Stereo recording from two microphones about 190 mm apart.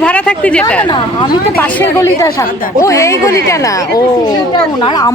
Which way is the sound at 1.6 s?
10° left (ahead or behind).